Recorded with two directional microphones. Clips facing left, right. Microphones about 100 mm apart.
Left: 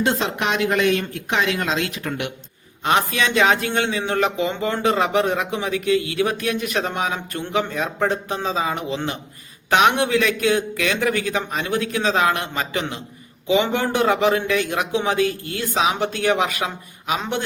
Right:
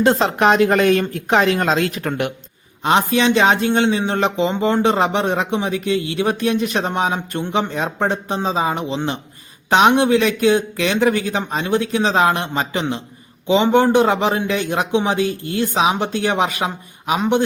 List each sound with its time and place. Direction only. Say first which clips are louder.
0.0 s speech: right 7 dB; 40° right (ahead or behind)
2.8 s speech: right 4 dB; 25° right (ahead or behind)